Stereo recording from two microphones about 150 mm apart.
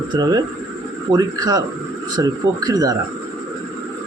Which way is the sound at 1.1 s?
25° right (ahead or behind).